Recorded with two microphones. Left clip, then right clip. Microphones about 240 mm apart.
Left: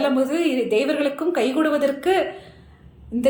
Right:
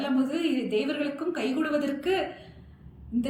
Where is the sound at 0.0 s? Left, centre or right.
Left.